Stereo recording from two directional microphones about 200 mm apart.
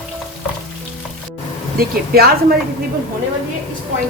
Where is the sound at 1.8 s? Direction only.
50° right (ahead or behind).